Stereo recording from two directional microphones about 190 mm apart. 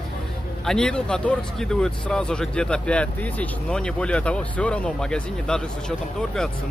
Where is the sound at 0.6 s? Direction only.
5° left (ahead or behind).